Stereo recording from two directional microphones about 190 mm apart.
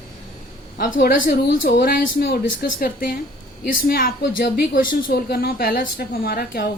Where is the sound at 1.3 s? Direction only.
50° left (ahead or behind).